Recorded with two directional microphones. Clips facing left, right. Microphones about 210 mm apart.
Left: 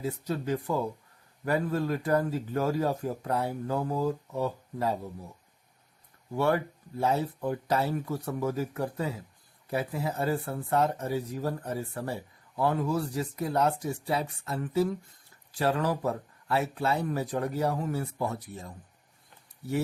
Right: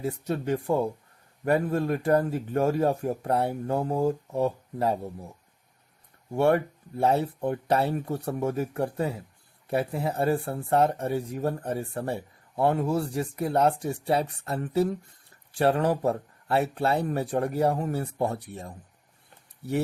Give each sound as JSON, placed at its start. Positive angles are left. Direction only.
{"t": 0.5, "sound": "speech", "side_deg": -25}
{"t": 6.3, "sound": "speech", "side_deg": -30}